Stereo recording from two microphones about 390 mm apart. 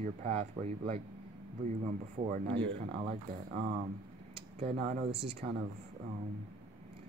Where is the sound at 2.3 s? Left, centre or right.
Centre.